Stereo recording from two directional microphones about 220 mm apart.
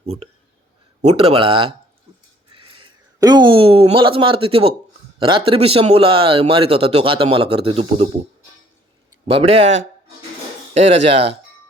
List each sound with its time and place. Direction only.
0.0 s speech: 25° right (ahead or behind)
9.2 s speech: 25° right (ahead or behind)
10.8 s speech: 25° right (ahead or behind)